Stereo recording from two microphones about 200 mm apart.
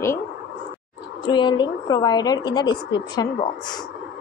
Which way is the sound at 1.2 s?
20° left (ahead or behind).